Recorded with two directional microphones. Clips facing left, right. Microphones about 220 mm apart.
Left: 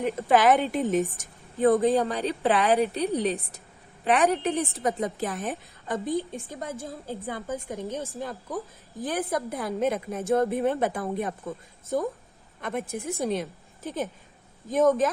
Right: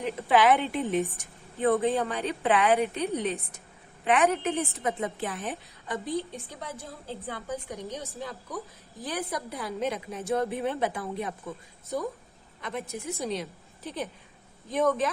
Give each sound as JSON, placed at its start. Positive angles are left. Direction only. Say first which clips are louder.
{"t": 0.2, "sound": "a woman's voice", "louder": "left 1 dB", "side_deg": 45}
{"t": 12.6, "sound": "a woman's voice", "louder": "left 4 dB", "side_deg": 50}